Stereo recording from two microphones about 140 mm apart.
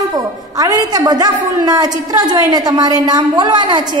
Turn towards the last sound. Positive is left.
turn(degrees=-30)  # may be behind; listen again after turning